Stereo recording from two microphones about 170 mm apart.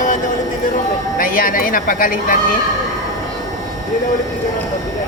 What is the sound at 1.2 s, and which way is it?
Speech, 55° left (ahead or behind).